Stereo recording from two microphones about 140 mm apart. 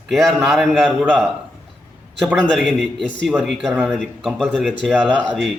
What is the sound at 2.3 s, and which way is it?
Speech, 5° left (ahead or behind).